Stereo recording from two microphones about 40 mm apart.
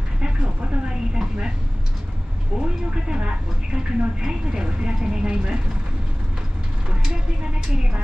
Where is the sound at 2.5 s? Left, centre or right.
Right.